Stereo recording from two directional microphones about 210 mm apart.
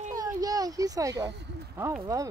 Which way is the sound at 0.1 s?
20° right (ahead or behind).